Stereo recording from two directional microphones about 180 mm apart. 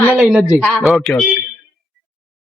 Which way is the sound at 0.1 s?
Centre (ahead or behind).